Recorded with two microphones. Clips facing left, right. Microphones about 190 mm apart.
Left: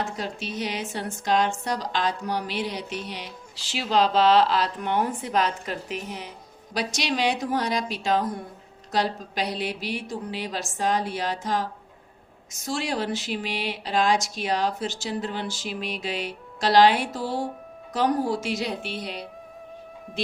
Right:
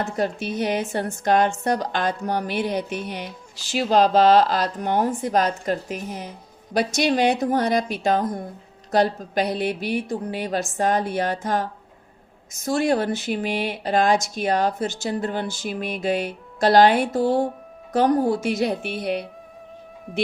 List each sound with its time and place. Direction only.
0.2 s a woman's voice: 55° right (ahead or behind)